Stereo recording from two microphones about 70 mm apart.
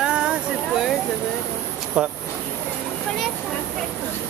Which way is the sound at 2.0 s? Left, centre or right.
Centre.